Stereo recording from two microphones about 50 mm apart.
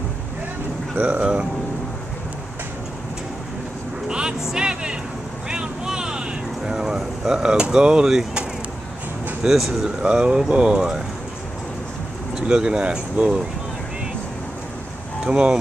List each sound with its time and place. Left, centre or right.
0.9 s speech: right
4.1 s music: centre
5.5 s vehicle: centre
7.5 s speech: centre
9.4 s speech: centre
10.0 s speech: centre
12.4 s speech: centre
15.2 s speech: centre